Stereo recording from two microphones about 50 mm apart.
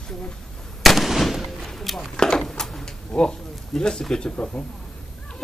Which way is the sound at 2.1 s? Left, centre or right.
Centre.